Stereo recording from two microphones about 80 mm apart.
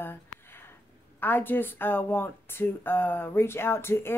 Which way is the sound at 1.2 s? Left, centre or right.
Left.